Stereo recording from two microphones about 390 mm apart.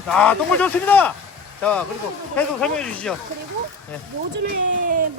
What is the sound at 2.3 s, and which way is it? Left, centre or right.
Speech, centre.